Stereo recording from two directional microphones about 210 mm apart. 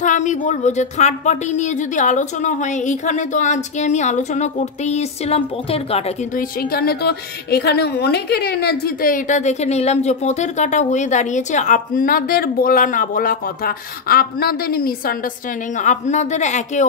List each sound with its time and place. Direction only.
0.0 s speech: 35° left (ahead or behind)
6.6 s a woman's voice: 45° left (ahead or behind)